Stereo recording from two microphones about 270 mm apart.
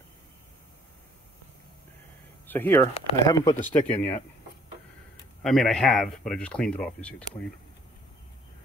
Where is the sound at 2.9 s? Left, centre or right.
Left.